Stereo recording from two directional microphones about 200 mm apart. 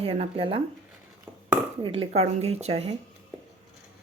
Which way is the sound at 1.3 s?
10° right (ahead or behind).